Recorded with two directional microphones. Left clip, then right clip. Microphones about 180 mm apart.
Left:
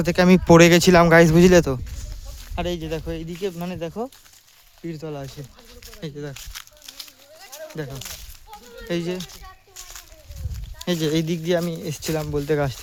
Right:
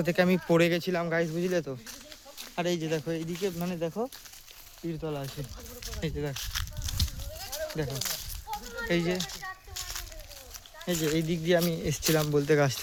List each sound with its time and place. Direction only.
0.0 s speech: 50° left (ahead or behind); by 1.8 s 65° left (ahead or behind)
2.6 s speech: 30° left (ahead or behind)
3.4 s speech: 60° left (ahead or behind)
6.0 s speech: 25° left (ahead or behind)
6.3 s a sound: 15° right (ahead or behind)
7.9 s speech: 5° right (ahead or behind)
8.9 s speech: 35° left (ahead or behind)
9.1 s a sound: 10° right (ahead or behind)
10.8 s speech: 65° left (ahead or behind)
11.4 s speech: 30° left (ahead or behind)